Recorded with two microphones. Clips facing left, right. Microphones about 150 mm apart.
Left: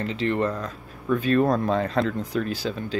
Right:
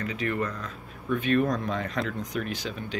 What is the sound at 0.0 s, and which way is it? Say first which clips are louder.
Speech: left 5 dB; 25° left (ahead or behind).